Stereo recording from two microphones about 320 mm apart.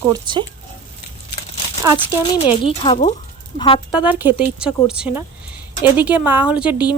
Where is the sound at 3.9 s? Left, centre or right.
Centre.